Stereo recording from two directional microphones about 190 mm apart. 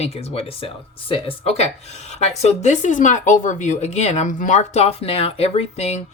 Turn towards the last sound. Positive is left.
turn(degrees=35)  # may be behind; listen again after turning